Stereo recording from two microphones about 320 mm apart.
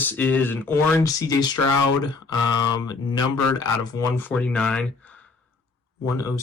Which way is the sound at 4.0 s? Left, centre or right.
Centre.